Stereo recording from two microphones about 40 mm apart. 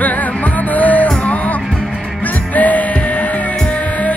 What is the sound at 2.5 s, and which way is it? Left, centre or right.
Music, left.